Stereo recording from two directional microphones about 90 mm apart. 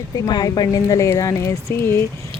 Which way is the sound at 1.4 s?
30° left (ahead or behind).